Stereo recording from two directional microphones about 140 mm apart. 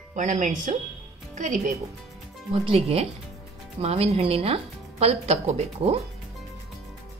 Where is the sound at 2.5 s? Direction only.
45° right (ahead or behind).